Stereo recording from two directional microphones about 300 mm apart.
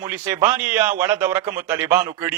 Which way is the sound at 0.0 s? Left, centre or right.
Centre.